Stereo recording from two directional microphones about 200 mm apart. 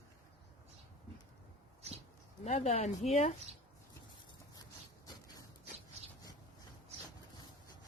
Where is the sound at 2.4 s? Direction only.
30° left (ahead or behind).